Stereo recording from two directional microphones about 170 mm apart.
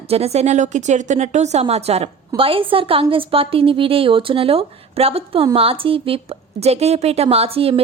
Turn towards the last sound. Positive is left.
turn(degrees=-35)  # may be behind; listen again after turning